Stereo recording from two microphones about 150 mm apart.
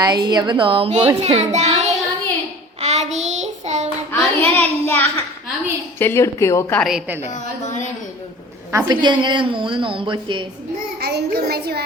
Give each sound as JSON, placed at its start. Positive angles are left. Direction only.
{"t": 0.0, "sound": "a woman's voice", "side_deg": -25}
{"t": 1.2, "sound": "child singing", "side_deg": -45}
{"t": 4.1, "sound": "a sound", "side_deg": 15}
{"t": 6.0, "sound": "speech", "side_deg": 15}
{"t": 6.7, "sound": "a woman's voice", "side_deg": 0}
{"t": 7.3, "sound": "a woman's voice", "side_deg": 55}
{"t": 8.7, "sound": "a woman's voice", "side_deg": -30}
{"t": 11.0, "sound": "a child's voice", "side_deg": -90}